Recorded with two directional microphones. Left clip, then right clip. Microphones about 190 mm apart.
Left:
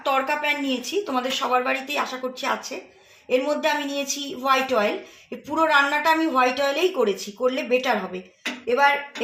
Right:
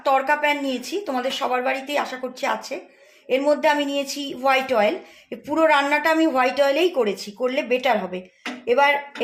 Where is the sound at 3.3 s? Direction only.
35° right (ahead or behind).